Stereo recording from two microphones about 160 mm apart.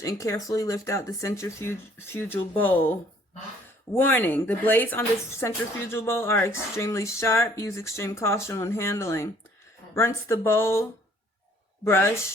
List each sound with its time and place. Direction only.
0.0 s speech: 20° left (ahead or behind)
11.9 s speech: 15° left (ahead or behind)